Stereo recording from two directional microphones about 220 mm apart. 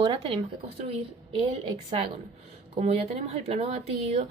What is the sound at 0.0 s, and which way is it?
Speech, 20° right (ahead or behind).